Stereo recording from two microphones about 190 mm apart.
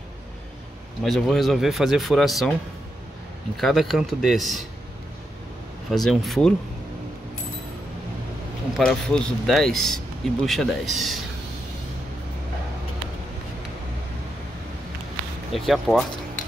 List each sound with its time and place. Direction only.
1.0 s a man's voice: centre (ahead or behind)
3.5 s a man's voice: centre (ahead or behind)
6.0 s a man's voice: centre (ahead or behind)
8.7 s a man's voice: centre (ahead or behind)
15.5 s a man's voice: centre (ahead or behind)